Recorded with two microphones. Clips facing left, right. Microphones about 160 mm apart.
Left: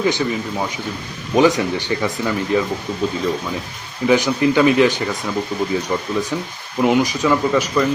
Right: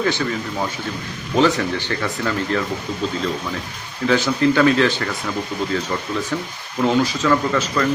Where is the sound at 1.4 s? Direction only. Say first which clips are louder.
Left 3 dB; 15° left (ahead or behind).